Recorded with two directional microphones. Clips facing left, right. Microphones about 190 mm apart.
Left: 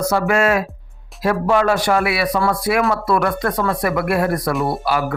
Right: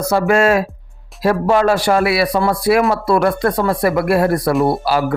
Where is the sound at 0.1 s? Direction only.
35° right (ahead or behind).